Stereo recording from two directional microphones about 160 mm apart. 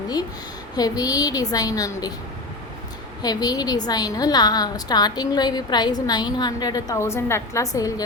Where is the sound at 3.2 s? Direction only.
25° left (ahead or behind).